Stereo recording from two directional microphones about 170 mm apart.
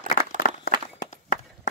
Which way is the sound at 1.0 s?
50° left (ahead or behind).